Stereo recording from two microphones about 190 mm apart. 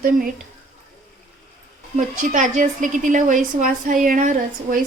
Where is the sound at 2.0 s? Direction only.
45° right (ahead or behind).